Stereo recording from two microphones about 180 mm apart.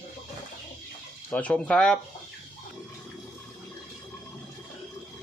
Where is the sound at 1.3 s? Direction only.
5° left (ahead or behind).